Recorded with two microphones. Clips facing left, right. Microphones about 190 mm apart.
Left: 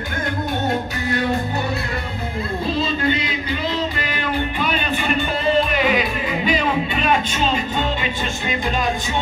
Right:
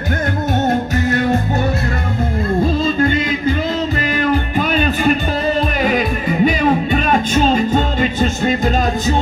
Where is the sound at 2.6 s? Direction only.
45° right (ahead or behind).